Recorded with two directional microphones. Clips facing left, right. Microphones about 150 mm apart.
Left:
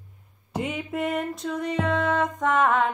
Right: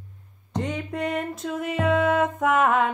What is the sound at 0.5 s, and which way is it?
Music, 5° left (ahead or behind).